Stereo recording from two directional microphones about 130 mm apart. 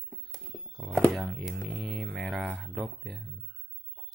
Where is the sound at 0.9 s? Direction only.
10° right (ahead or behind).